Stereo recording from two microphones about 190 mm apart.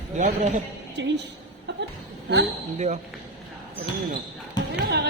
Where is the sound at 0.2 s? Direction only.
40° right (ahead or behind).